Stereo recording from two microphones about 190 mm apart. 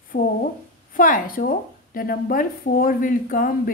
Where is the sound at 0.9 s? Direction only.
45° left (ahead or behind).